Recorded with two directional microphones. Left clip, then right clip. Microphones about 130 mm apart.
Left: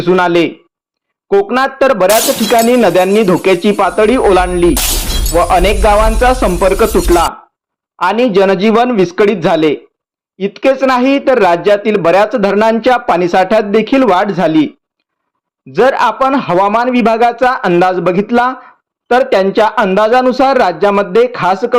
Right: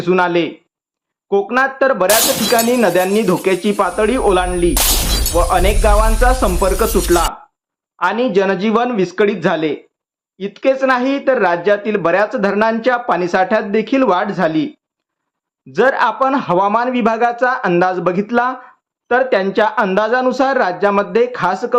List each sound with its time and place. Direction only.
0.0 s speech: 35° left (ahead or behind)
15.7 s a man's voice: 25° left (ahead or behind)